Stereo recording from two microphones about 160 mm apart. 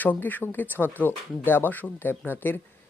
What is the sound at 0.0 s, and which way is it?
Speech, 10° left (ahead or behind).